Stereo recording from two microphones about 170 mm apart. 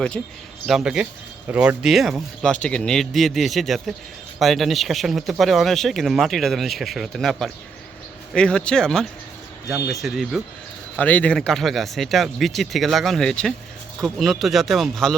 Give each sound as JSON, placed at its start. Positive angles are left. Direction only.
{"t": 0.2, "sound": "speech", "side_deg": 0}